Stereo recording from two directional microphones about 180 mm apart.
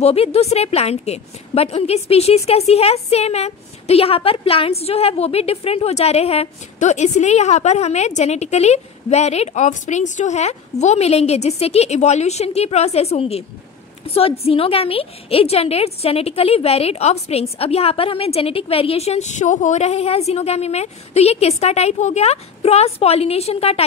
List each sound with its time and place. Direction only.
0.0 s a woman's voice: 35° left (ahead or behind)